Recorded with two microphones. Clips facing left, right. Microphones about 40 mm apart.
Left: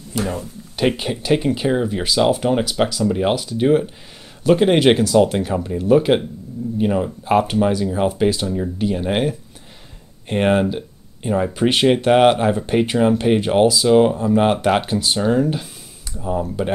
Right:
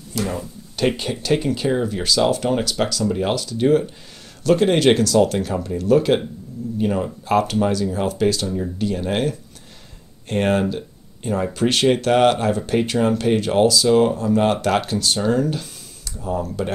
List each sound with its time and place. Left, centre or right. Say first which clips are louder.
0.1 s speech: left 1 dB; centre